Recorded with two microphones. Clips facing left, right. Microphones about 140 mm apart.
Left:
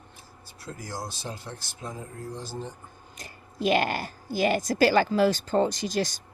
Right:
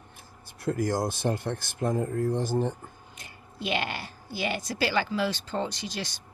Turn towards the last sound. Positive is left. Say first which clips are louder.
# left 8 dB
turn(degrees=45)  # may be behind; listen again after turning